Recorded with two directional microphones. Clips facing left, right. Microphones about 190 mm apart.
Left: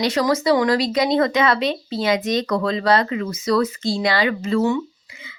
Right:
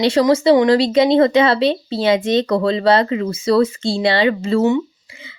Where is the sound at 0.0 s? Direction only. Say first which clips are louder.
Right 6 dB; 30° right (ahead or behind).